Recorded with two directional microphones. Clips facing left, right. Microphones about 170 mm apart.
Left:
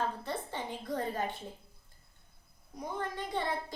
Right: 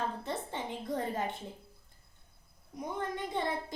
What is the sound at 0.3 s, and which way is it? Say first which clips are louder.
A woman's voice: even; 20° right (ahead or behind).